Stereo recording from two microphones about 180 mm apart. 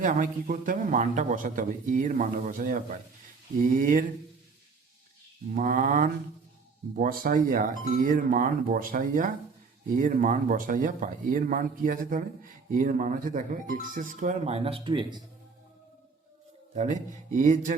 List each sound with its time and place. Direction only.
0.0 s speech: 45° right (ahead or behind)
5.5 s speech: 50° right (ahead or behind); by 15.2 s 30° right (ahead or behind)
16.7 s speech: 40° right (ahead or behind)